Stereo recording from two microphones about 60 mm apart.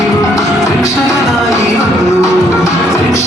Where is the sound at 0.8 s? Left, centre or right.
Left.